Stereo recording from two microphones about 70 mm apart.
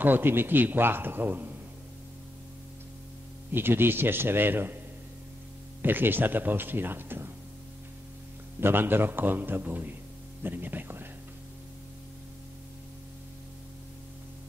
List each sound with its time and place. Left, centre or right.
0.0 s speech: right
3.5 s a man's voice: right
5.8 s speech: right
8.5 s a man's voice: right